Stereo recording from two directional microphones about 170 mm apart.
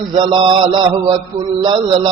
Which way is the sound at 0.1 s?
30° right (ahead or behind).